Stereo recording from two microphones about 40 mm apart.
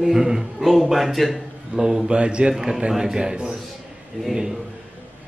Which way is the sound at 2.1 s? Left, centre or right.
Right.